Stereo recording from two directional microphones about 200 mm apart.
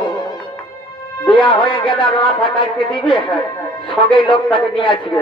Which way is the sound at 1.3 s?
25° left (ahead or behind).